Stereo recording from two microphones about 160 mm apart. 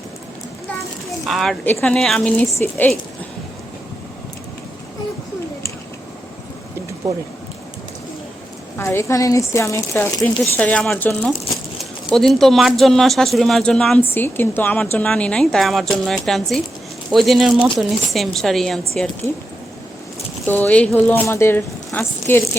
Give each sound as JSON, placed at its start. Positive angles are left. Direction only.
{"t": 1.3, "sound": "speech", "side_deg": 0}
{"t": 8.8, "sound": "speech", "side_deg": 15}
{"t": 20.5, "sound": "speech", "side_deg": 10}